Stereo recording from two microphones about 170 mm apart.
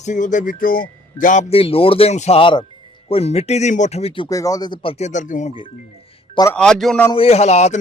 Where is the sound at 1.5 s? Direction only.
35° left (ahead or behind).